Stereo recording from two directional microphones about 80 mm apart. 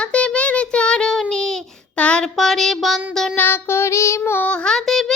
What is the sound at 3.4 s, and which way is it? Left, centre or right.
Child singing, left.